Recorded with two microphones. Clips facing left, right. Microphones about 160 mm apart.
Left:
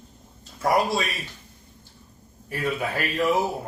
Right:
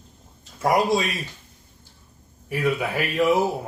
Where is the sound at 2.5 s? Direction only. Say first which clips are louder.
Right 3 dB; 15° right (ahead or behind).